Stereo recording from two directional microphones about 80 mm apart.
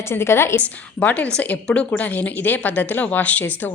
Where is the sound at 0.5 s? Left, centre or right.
Centre.